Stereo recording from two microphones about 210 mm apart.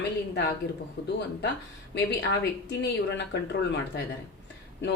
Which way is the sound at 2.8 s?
55° left (ahead or behind).